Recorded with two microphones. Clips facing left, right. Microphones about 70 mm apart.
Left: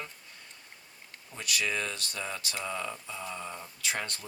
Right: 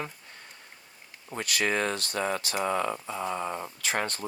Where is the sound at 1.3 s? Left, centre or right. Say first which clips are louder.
Right 5 dB; right.